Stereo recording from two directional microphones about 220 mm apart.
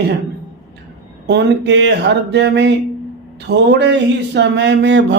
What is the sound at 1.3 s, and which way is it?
Speech, 55° right (ahead or behind).